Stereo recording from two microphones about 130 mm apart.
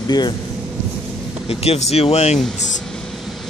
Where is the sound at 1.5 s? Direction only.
50° left (ahead or behind).